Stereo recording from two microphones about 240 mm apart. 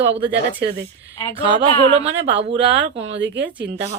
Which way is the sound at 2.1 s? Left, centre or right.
Right.